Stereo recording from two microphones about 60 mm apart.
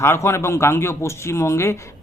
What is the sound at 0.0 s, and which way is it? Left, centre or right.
A man's voice, left.